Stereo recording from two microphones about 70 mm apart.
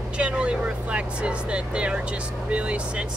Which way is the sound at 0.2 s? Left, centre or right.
Centre.